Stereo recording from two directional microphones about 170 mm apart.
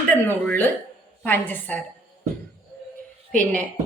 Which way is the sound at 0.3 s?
10° left (ahead or behind).